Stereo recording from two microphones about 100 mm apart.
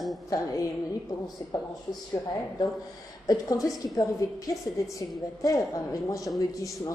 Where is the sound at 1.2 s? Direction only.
40° left (ahead or behind).